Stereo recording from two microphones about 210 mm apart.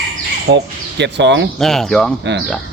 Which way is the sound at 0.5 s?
55° right (ahead or behind).